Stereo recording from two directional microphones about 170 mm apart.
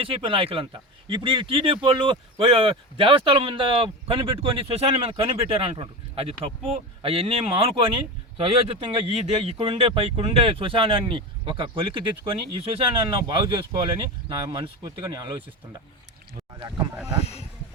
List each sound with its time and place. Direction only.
0.0 s speech: 30° right (ahead or behind)
16.6 s speech: 25° right (ahead or behind)